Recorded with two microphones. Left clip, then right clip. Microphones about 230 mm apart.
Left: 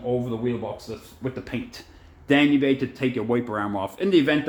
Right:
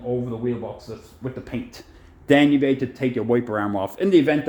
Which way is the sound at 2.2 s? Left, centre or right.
Right.